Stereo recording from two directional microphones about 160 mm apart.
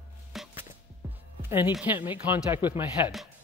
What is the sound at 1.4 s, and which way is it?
Music, 15° right (ahead or behind).